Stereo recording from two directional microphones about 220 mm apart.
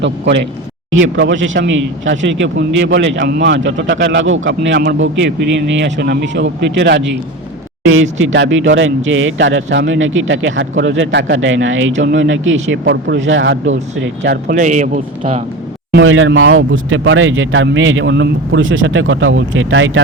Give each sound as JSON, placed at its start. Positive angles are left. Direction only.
{"t": 0.0, "sound": "speech", "side_deg": -55}
{"t": 15.9, "sound": "speech", "side_deg": -60}